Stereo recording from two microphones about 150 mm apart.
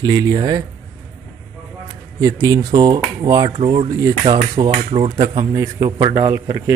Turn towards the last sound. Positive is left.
turn(degrees=-20)  # may be behind; listen again after turning